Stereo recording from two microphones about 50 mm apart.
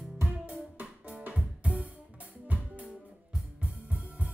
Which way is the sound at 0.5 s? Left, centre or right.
Right.